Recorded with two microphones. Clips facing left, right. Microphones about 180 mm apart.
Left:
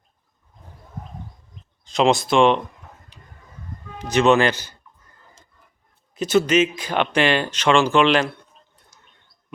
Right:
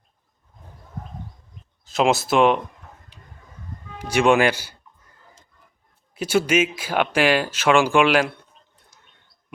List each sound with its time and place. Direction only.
1.8 s speech: 5° right (ahead or behind)
3.9 s speech: 10° right (ahead or behind)
6.1 s speech: 10° right (ahead or behind)
8.9 s a sound: 45° left (ahead or behind)